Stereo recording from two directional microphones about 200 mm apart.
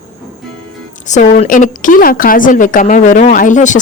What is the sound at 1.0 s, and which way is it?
A woman's voice, 35° left (ahead or behind).